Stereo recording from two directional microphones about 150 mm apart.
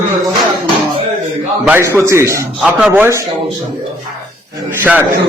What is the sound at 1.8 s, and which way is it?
A man's voice, 20° right (ahead or behind).